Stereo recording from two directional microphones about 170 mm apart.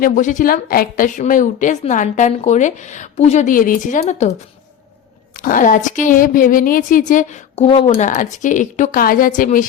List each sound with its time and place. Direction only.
0.0 s a woman's voice: 50° left (ahead or behind)
5.4 s a woman's voice: 50° left (ahead or behind)